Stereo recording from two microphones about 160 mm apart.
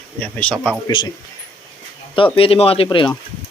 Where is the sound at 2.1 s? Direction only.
30° left (ahead or behind).